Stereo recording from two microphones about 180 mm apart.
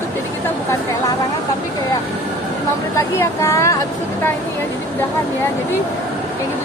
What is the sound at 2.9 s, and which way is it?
Speech, 15° left (ahead or behind).